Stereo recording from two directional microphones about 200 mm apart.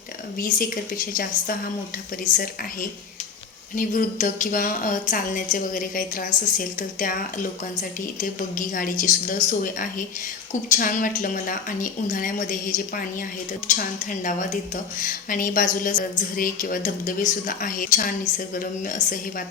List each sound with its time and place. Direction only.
0.3 s a woman's voice: 45° left (ahead or behind)
3.8 s a woman's voice: 40° left (ahead or behind)